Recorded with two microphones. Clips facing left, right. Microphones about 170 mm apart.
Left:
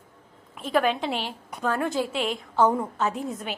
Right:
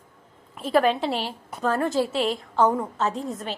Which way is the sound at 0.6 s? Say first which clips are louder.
Right 3 dB; centre (ahead or behind).